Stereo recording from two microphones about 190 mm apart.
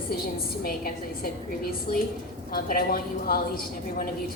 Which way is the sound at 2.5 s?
50° left (ahead or behind).